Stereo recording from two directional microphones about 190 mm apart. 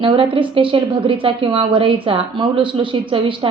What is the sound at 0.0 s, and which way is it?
A woman's voice, 25° right (ahead or behind).